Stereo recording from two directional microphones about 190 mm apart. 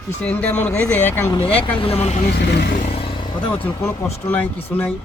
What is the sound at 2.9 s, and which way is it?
Music, 30° left (ahead or behind).